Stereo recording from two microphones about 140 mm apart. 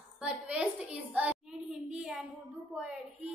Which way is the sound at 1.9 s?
5° right (ahead or behind).